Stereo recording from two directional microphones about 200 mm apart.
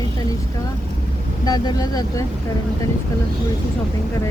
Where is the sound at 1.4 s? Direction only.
20° left (ahead or behind).